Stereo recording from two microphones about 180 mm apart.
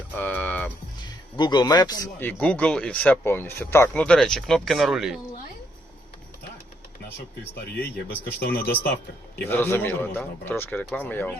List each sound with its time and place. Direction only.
0.2 s music: 10° left (ahead or behind)
1.0 s speech: 25° left (ahead or behind)
2.2 s speech: 5° left (ahead or behind)
8.2 s speech: 60° left (ahead or behind)
9.5 s a man's voice: 15° left (ahead or behind)